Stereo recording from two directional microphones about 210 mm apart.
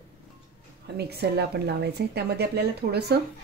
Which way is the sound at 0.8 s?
50° right (ahead or behind).